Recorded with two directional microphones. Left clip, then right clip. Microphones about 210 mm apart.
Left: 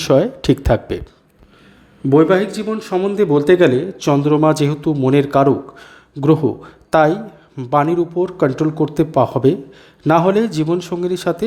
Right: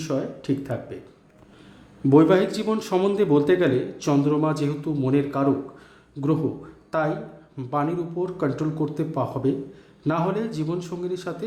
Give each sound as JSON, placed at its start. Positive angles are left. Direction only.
{"t": 0.0, "sound": "a man's voice", "side_deg": 40}
{"t": 2.0, "sound": "speech", "side_deg": 15}
{"t": 3.2, "sound": "a man's voice", "side_deg": 20}